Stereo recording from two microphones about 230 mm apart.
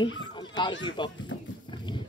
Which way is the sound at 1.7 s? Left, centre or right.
Centre.